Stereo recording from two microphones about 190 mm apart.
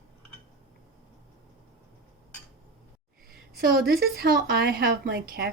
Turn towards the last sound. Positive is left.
turn(degrees=-50)  # may be behind; listen again after turning